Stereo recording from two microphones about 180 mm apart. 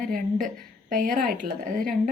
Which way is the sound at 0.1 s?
50° right (ahead or behind).